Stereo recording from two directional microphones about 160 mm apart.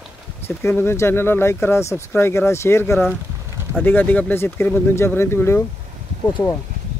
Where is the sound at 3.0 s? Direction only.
10° right (ahead or behind).